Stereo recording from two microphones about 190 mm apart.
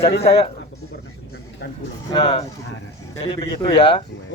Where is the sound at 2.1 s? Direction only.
30° left (ahead or behind).